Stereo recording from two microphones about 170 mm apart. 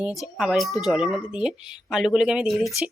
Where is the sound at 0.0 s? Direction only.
Centre (ahead or behind).